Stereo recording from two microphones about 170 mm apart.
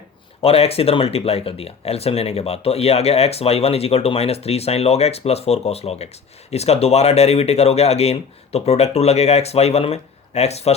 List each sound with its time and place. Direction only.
0.4 s speech: 35° left (ahead or behind)